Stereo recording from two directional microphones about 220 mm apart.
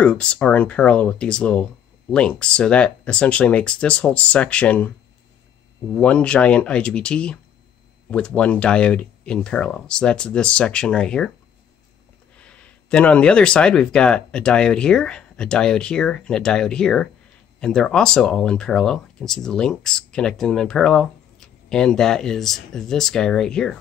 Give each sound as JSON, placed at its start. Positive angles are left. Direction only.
{"t": 0.0, "sound": "speech", "side_deg": 5}
{"t": 5.9, "sound": "speech", "side_deg": 5}
{"t": 12.4, "sound": "speech", "side_deg": 5}